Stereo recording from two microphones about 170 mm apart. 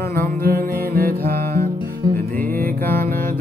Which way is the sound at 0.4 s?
60° right (ahead or behind).